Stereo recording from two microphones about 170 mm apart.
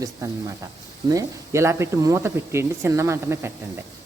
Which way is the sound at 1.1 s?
20° right (ahead or behind).